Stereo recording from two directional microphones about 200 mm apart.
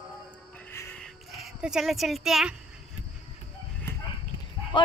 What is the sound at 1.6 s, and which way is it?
Speech, centre (ahead or behind).